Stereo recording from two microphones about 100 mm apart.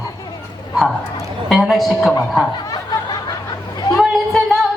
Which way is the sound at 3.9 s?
5° left (ahead or behind).